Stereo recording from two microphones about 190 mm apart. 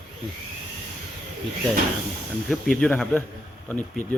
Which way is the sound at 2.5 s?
5° left (ahead or behind).